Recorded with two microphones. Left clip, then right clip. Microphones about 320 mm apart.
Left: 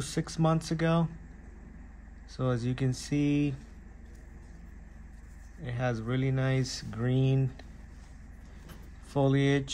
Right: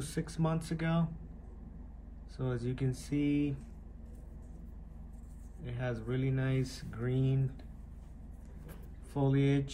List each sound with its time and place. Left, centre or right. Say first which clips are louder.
0.0 s speech: left 6 dB; left
2.3 s speech: left 6 dB; left
5.6 s speech: left 6 dB; left
9.1 s speech: left 5 dB; left